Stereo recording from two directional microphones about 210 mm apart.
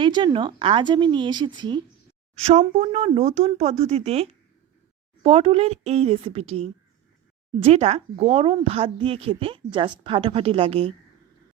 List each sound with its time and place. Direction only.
0.0 s speech: 20° right (ahead or behind)
2.4 s speech: 35° right (ahead or behind)